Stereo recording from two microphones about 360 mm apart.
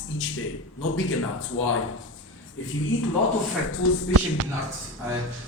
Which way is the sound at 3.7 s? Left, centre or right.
Left.